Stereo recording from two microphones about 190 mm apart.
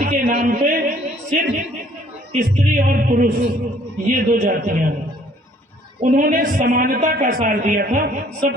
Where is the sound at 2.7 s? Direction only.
45° right (ahead or behind).